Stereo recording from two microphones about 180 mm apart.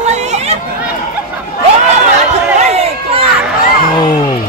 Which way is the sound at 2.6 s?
35° right (ahead or behind).